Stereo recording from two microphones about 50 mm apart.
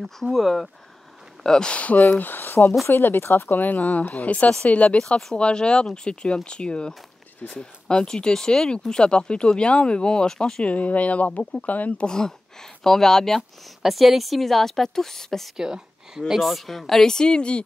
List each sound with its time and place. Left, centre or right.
0.2 s a woman's voice: centre
1.4 s speech: centre
1.8 s speech: left; by 10.6 s centre
10.6 s speech: left
12.1 s speech: centre
13.8 s a woman's voice: centre
15.5 s speech: centre; by 17.6 s left